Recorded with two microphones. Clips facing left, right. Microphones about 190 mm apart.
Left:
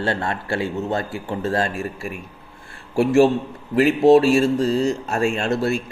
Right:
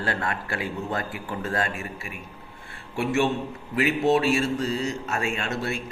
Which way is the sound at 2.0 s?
40° left (ahead or behind).